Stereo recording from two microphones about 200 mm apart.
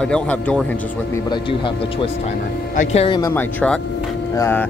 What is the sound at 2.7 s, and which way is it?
Speech, 35° left (ahead or behind).